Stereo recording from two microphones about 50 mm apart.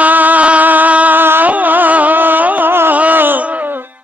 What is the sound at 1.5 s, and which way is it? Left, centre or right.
Carnatic music, right.